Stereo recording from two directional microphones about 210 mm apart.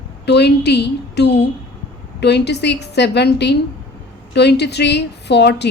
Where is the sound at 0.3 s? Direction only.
55° left (ahead or behind).